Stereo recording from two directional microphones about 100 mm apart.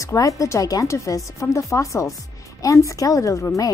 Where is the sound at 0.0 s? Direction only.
35° left (ahead or behind).